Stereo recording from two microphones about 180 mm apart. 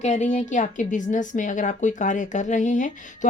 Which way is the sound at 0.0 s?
40° left (ahead or behind).